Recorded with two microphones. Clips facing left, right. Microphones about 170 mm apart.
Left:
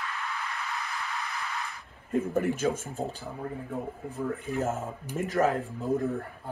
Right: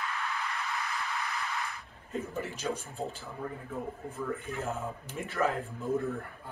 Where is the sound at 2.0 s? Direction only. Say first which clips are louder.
Left 9 dB; 55° left (ahead or behind).